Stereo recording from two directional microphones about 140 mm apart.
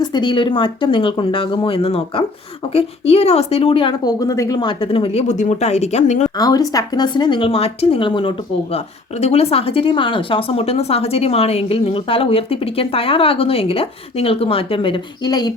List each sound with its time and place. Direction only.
0.0 s speech: 30° left (ahead or behind); by 6.3 s 55° left (ahead or behind)
6.3 s speech: 25° left (ahead or behind)
8.7 s speech: 50° left (ahead or behind); by 15.5 s 30° left (ahead or behind)